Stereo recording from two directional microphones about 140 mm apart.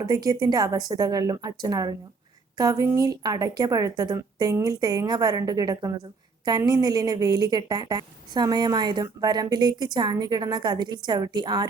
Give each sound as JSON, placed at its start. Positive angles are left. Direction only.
{"t": 0.0, "sound": "a woman's voice", "side_deg": -25}